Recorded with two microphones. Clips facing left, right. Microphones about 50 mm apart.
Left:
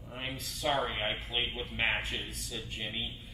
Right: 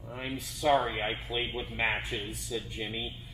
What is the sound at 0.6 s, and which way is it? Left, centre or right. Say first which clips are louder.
Speech: right 5 dB; centre.